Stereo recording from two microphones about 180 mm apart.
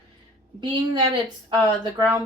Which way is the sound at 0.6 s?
25° right (ahead or behind).